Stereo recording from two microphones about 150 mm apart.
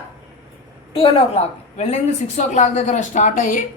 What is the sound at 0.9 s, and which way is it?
A woman's voice, 40° left (ahead or behind).